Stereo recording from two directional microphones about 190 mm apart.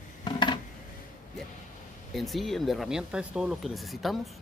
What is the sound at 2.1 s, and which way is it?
Speech, centre (ahead or behind).